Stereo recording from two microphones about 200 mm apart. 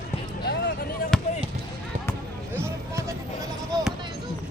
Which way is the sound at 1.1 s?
5° left (ahead or behind).